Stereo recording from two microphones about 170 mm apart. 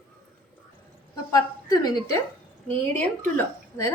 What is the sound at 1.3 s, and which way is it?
A woman's voice, 20° left (ahead or behind).